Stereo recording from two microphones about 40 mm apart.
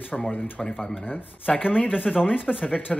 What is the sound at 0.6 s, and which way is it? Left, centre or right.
Speech, left.